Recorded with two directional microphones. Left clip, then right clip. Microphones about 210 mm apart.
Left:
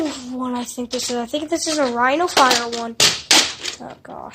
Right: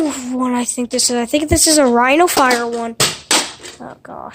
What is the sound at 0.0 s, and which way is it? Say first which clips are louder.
Speech: right 6 dB; 30° right (ahead or behind).